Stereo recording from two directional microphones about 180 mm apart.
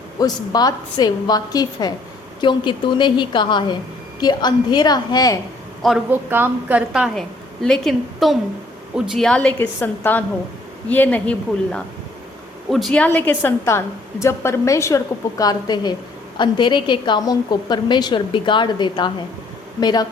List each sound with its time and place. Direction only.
0.2 s a woman's voice: 20° left (ahead or behind)
5.8 s a woman's voice: 5° right (ahead or behind); by 20.1 s 25° left (ahead or behind)